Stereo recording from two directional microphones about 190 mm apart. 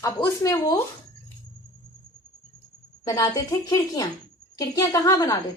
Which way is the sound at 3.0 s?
20° left (ahead or behind).